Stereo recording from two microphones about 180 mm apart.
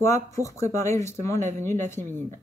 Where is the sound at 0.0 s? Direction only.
15° left (ahead or behind).